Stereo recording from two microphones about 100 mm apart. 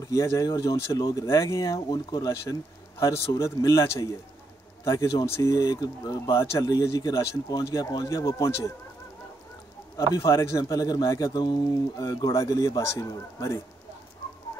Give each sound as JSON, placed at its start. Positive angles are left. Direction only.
{"t": 0.0, "sound": "a man's voice", "side_deg": 30}
{"t": 9.9, "sound": "a man's voice", "side_deg": 30}